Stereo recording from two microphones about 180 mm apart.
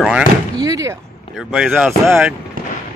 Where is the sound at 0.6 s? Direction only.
20° right (ahead or behind).